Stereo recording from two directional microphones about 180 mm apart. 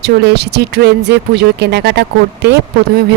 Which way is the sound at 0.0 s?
65° right (ahead or behind).